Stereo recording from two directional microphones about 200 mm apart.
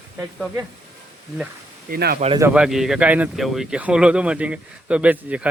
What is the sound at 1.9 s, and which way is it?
Speech, 50° right (ahead or behind).